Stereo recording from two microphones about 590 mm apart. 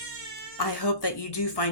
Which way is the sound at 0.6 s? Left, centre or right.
Left.